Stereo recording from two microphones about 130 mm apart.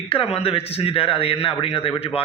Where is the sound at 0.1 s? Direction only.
45° left (ahead or behind).